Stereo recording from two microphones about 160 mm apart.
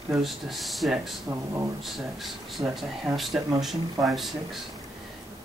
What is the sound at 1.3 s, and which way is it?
Speech, 15° right (ahead or behind).